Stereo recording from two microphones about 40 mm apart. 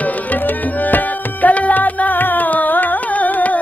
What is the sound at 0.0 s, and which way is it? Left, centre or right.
Tabla, left.